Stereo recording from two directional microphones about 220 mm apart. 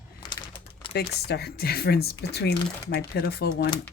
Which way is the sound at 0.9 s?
50° left (ahead or behind).